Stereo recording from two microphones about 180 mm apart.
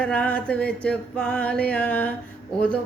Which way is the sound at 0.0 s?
5° left (ahead or behind).